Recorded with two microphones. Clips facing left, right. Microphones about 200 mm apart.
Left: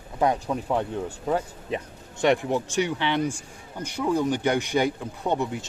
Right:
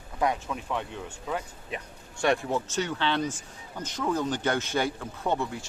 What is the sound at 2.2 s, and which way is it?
A man's voice, 20° left (ahead or behind).